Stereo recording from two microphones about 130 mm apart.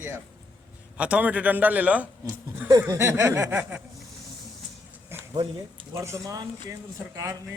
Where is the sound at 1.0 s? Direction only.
10° right (ahead or behind).